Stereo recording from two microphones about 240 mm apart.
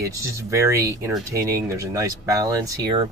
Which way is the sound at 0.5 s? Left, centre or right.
Centre.